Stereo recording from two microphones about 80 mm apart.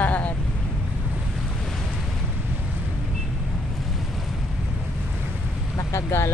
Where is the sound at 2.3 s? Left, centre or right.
Right.